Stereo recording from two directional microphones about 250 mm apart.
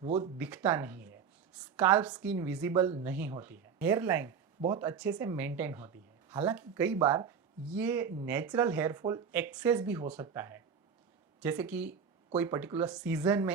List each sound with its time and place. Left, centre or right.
0.0 s speech: right
0.3 s speech: centre